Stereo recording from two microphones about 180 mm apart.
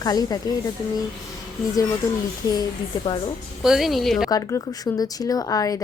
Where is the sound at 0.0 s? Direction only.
20° left (ahead or behind).